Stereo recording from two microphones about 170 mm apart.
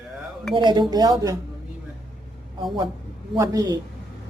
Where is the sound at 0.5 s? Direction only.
25° right (ahead or behind).